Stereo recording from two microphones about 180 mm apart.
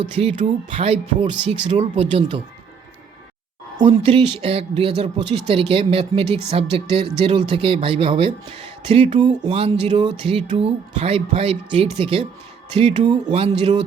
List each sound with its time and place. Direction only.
0.2 s speech: 35° right (ahead or behind)
3.8 s speech: 30° right (ahead or behind)